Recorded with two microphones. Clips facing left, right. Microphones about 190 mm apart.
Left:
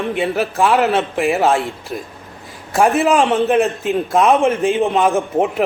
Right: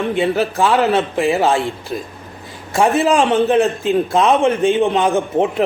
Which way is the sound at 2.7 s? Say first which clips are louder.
Even; centre (ahead or behind).